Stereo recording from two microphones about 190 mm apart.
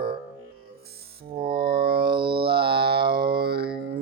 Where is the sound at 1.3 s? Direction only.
30° right (ahead or behind).